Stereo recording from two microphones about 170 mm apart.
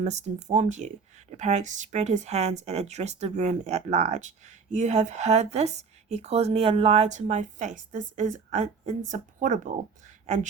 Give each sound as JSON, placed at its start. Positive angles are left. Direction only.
{"t": 0.0, "sound": "speech", "side_deg": -40}